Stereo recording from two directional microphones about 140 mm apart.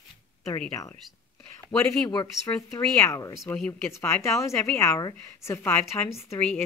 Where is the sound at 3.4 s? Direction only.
5° left (ahead or behind).